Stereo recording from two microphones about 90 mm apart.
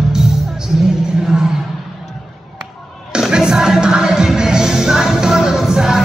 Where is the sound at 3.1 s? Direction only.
10° right (ahead or behind).